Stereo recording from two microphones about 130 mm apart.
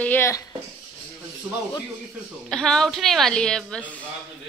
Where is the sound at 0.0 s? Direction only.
15° left (ahead or behind).